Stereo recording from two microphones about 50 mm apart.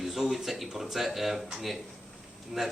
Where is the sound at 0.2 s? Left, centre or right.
Centre.